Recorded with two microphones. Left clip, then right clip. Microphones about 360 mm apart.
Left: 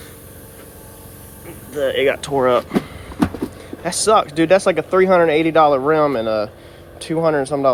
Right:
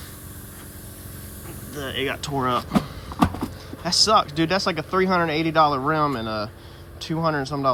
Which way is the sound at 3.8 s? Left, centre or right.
Centre.